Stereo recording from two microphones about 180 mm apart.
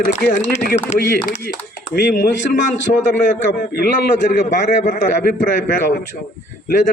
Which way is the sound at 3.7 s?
50° left (ahead or behind).